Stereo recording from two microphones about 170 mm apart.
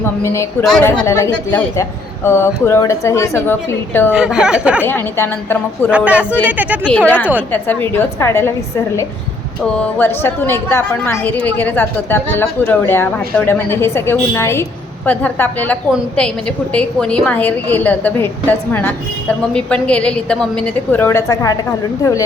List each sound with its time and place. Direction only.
0.0 s a woman's voice: 15° left (ahead or behind)
4.1 s speech: 5° right (ahead or behind)
4.8 s a woman's voice: 10° left (ahead or behind)
5.9 s speech: 5° right (ahead or behind)
6.8 s a woman's voice: 10° left (ahead or behind)